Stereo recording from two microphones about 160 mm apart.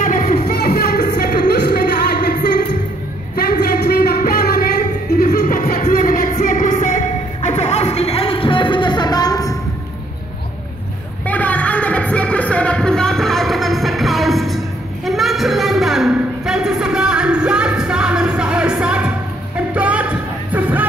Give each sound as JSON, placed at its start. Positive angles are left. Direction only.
{"t": 0.0, "sound": "music", "side_deg": 60}
{"t": 0.5, "sound": "music", "side_deg": 75}
{"t": 3.3, "sound": "a sound", "side_deg": 75}
{"t": 5.9, "sound": "music", "side_deg": 65}
{"t": 11.2, "sound": "music", "side_deg": 10}
{"t": 15.0, "sound": "a sound", "side_deg": 0}
{"t": 19.7, "sound": "music", "side_deg": -10}